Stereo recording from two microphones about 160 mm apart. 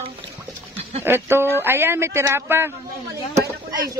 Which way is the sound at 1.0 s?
15° right (ahead or behind).